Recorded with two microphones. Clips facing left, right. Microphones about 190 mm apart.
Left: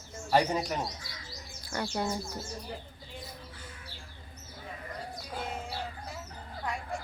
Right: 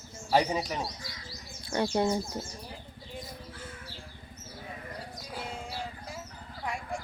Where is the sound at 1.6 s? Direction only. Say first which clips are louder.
Right 6 dB; 25° right (ahead or behind).